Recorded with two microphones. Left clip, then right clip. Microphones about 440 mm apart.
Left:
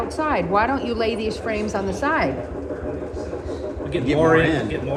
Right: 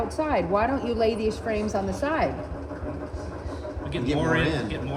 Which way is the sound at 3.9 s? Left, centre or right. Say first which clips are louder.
Left 8 dB; centre.